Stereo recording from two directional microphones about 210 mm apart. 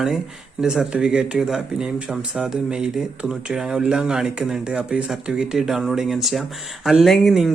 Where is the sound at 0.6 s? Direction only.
5° right (ahead or behind).